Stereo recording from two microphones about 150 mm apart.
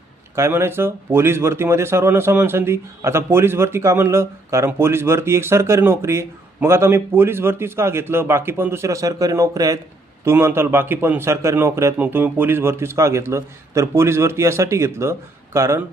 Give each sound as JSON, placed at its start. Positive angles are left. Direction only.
{"t": 0.3, "sound": "speech", "side_deg": -15}